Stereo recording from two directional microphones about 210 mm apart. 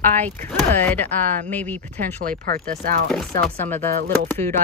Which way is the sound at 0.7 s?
10° left (ahead or behind).